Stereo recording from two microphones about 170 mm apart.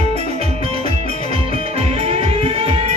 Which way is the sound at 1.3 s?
35° right (ahead or behind).